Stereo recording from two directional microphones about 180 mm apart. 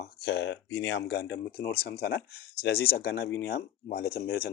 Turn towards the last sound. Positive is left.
turn(degrees=60)  # may be behind; listen again after turning